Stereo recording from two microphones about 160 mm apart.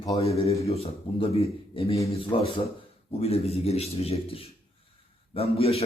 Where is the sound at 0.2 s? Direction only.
40° left (ahead or behind).